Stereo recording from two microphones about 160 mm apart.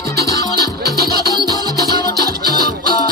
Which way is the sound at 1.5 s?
25° left (ahead or behind).